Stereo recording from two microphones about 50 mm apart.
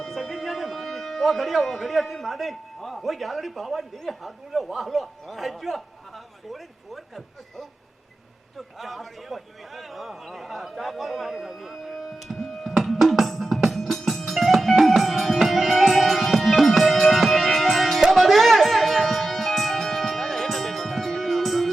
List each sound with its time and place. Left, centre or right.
0.0 s speech: centre
8.5 s a sound: centre
18.0 s music: centre